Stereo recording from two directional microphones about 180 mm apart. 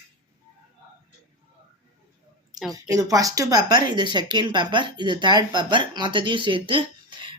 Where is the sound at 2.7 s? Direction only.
20° right (ahead or behind).